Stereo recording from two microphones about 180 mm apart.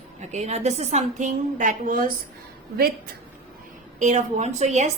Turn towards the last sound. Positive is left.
turn(degrees=-40)  # may be behind; listen again after turning